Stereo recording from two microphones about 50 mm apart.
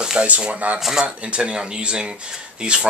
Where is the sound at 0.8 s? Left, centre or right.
Centre.